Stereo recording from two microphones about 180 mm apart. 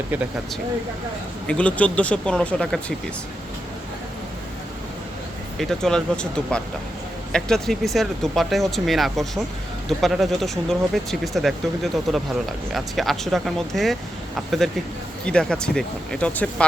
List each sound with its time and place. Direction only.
1.5 s speech: 5° left (ahead or behind)
5.5 s speech: 5° left (ahead or behind)